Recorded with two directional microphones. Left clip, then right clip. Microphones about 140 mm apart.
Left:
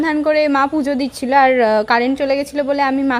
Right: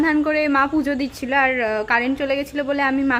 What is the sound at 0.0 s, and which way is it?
A woman's voice, 35° left (ahead or behind).